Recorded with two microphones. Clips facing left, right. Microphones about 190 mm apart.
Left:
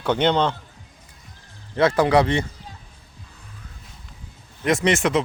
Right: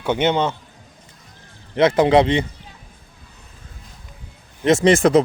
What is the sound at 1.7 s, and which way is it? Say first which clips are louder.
Speech: right 3 dB; 20° right (ahead or behind).